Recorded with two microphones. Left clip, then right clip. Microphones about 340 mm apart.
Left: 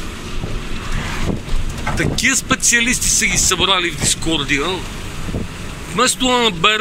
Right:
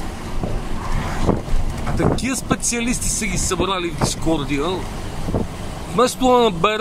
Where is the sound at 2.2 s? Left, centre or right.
Centre.